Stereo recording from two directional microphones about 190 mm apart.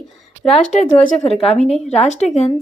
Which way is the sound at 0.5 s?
35° left (ahead or behind).